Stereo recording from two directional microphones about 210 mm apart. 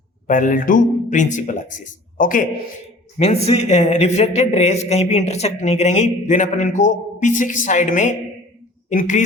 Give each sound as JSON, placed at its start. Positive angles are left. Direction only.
{"t": 0.3, "sound": "speech", "side_deg": 40}
{"t": 3.2, "sound": "speech", "side_deg": 30}